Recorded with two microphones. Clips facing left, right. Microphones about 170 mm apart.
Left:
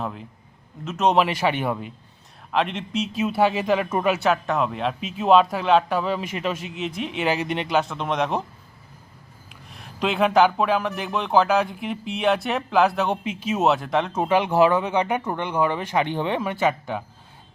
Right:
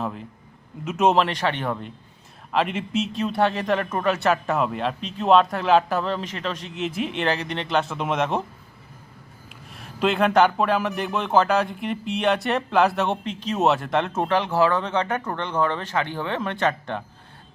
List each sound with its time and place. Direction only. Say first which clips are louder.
0.0 s speech: right 1 dB; centre (ahead or behind)
1.1 s speech: left 1 dB; 5° left (ahead or behind)
2.5 s speech: right 1 dB; 5° right (ahead or behind)
7.8 s speech: right 1 dB; 5° right (ahead or behind)
9.5 s speech: right 1 dB; centre (ahead or behind)
14.3 s speech: left 5 dB; 15° left (ahead or behind)
16.4 s speech: left 1 dB; 10° left (ahead or behind)